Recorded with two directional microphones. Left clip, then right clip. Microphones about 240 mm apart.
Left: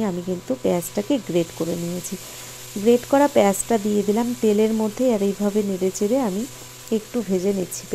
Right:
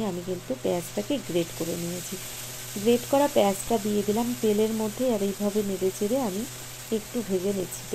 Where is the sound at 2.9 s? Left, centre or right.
Left.